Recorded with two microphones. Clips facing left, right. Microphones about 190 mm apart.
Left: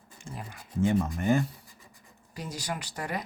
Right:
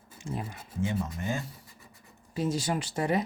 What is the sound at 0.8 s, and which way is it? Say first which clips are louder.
Speech: left 5 dB; 50° left (ahead or behind).